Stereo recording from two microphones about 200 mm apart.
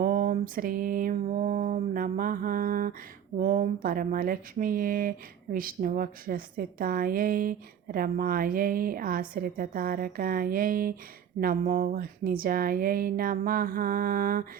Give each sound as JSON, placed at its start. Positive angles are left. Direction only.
{"t": 0.0, "sound": "speech", "side_deg": -45}